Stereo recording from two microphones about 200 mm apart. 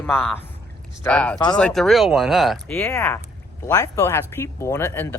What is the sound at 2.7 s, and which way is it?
Speech, 10° left (ahead or behind).